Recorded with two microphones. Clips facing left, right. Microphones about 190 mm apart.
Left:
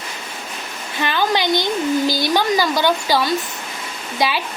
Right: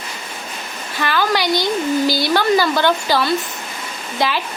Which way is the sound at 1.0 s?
20° left (ahead or behind).